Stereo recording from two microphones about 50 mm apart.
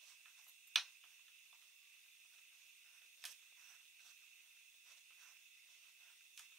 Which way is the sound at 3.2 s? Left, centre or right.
Centre.